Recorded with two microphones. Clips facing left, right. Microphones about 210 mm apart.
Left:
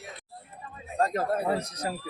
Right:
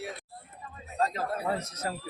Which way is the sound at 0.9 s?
50° left (ahead or behind).